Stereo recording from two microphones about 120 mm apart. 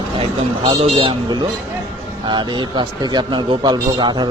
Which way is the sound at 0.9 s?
40° right (ahead or behind).